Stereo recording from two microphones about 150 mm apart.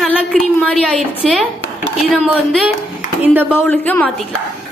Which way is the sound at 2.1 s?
10° right (ahead or behind).